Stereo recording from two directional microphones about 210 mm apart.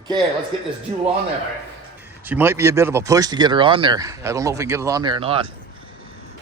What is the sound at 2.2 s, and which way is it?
Speech, 10° right (ahead or behind).